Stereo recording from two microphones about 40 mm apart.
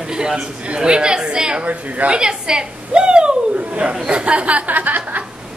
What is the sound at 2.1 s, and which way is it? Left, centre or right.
A woman's voice, centre.